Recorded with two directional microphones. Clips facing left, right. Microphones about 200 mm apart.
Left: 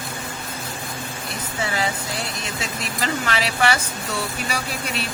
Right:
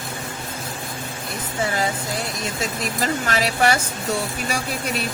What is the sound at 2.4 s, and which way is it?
Speech, 45° right (ahead or behind).